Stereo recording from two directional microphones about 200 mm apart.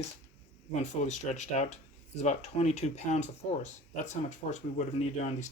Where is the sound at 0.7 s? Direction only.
35° left (ahead or behind).